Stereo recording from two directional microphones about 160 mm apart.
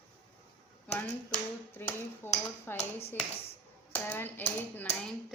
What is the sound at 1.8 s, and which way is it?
Speech, 15° left (ahead or behind).